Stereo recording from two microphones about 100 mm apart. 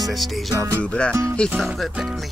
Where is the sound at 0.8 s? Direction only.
10° left (ahead or behind).